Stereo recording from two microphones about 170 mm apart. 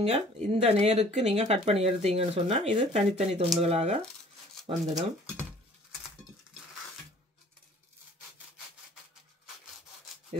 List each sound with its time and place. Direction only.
0.0 s speech: 40° right (ahead or behind)